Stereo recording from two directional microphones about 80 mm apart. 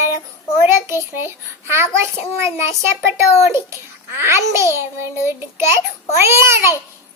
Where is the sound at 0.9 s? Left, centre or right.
Right.